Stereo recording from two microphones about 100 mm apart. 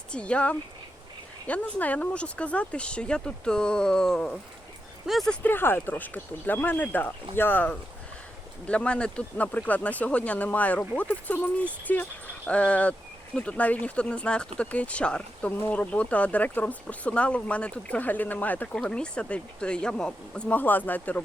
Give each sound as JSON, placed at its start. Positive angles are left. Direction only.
{"t": 0.1, "sound": "speech", "side_deg": 10}
{"t": 5.4, "sound": "speech", "side_deg": 20}